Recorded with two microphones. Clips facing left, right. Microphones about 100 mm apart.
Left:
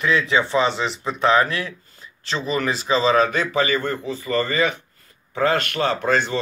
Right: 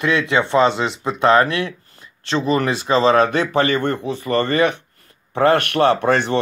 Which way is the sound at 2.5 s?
50° right (ahead or behind).